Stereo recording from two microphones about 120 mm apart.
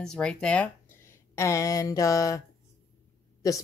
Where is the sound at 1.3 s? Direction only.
25° left (ahead or behind).